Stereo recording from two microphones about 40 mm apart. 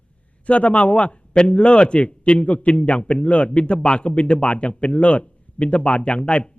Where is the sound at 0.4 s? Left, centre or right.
Left.